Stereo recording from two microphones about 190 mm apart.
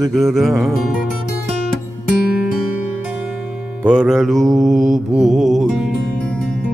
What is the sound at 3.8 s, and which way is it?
Music, 5° right (ahead or behind).